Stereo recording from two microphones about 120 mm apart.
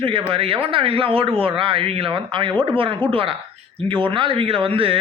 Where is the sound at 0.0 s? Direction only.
50° right (ahead or behind).